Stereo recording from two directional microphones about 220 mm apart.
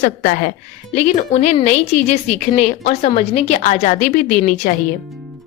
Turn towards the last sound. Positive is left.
turn(degrees=35)  # may be behind; listen again after turning